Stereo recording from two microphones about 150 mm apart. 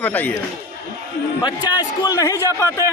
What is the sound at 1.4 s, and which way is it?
A man's voice, 30° left (ahead or behind).